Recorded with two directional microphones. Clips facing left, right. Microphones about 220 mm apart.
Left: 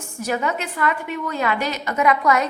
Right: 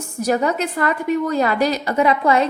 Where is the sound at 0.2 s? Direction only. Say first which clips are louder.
Right 5 dB; 40° right (ahead or behind).